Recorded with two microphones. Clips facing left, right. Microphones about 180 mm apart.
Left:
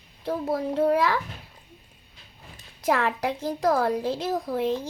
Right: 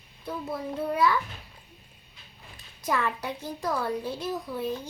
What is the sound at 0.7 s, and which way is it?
Speech, 80° left.